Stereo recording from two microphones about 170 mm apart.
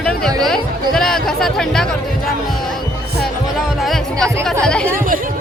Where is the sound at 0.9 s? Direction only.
5° left (ahead or behind).